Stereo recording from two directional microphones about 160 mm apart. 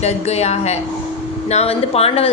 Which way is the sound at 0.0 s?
40° left (ahead or behind).